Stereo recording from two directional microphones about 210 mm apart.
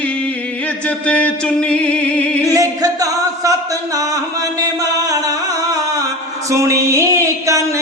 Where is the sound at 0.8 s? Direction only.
5° left (ahead or behind).